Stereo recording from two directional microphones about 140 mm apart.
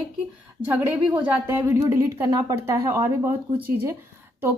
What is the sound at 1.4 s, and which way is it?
Speech, 15° right (ahead or behind).